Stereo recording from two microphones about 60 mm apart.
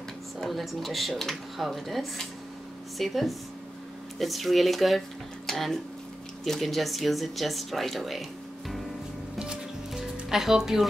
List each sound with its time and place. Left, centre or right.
0.4 s speech: centre
9.4 s music: centre